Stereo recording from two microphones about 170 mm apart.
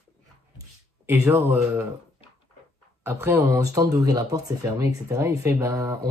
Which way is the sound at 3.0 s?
15° right (ahead or behind).